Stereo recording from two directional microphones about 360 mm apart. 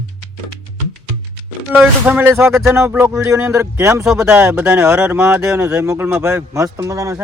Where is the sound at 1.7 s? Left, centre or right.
Centre.